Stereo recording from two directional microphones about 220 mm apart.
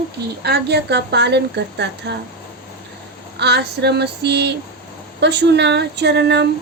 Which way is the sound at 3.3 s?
50° right (ahead or behind).